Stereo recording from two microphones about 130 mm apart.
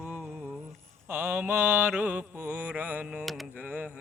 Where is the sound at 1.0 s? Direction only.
15° right (ahead or behind).